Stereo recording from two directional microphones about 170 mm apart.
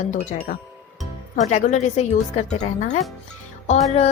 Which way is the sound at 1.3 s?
50° left (ahead or behind).